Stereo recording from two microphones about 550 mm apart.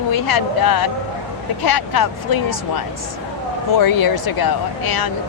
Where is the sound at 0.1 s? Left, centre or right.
Left.